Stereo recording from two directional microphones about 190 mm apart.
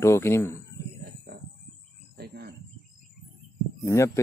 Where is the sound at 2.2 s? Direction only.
55° right (ahead or behind).